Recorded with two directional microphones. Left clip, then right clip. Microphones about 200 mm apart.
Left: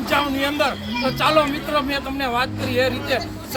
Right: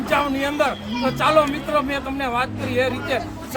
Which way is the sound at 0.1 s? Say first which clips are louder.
Even; centre (ahead or behind).